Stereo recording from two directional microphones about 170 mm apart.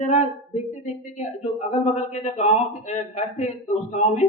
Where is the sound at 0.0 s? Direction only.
40° left (ahead or behind).